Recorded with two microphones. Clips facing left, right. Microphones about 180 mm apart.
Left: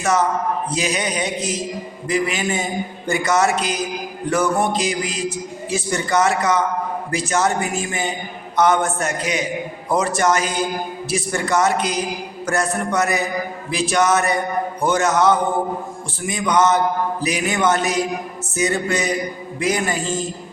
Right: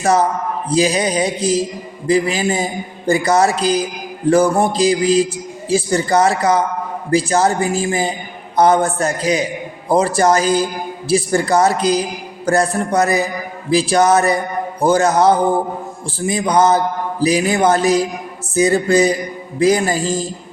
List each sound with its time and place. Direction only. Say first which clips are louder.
0.0 s a man's voice: right 3 dB; 35° right (ahead or behind)